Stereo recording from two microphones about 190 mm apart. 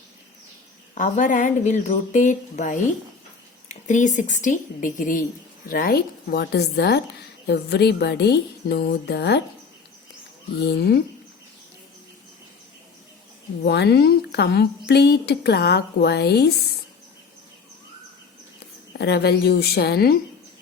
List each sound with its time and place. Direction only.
0.9 s a woman's voice: 40° left (ahead or behind); by 9.4 s 60° left (ahead or behind)
10.6 s speech: 60° left (ahead or behind)
13.7 s speech: 60° left (ahead or behind)
18.9 s speech: 60° left (ahead or behind)